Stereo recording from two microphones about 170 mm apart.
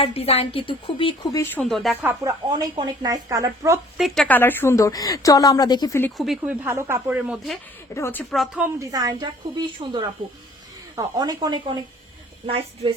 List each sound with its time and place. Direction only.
0.0 s speech: 35° left (ahead or behind)
1.6 s speech: centre (ahead or behind)
2.5 s speech: 25° right (ahead or behind)
3.9 s a woman's voice: centre (ahead or behind); by 6.0 s 25° left (ahead or behind)
6.1 s speech: centre (ahead or behind)
7.9 s speech: 15° left (ahead or behind)
8.3 s speech: centre (ahead or behind)
8.6 s a woman's voice: 20° right (ahead or behind)